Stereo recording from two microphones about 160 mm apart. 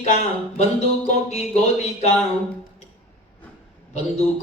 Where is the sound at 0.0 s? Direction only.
40° left (ahead or behind).